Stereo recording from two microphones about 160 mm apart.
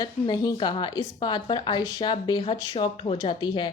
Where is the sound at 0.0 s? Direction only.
25° left (ahead or behind).